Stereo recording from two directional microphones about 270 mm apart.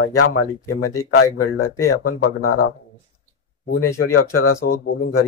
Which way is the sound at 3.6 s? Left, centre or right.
Left.